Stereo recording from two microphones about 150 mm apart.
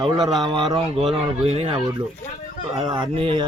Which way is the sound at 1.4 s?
40° right (ahead or behind).